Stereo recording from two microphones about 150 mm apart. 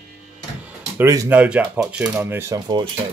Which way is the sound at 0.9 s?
20° right (ahead or behind).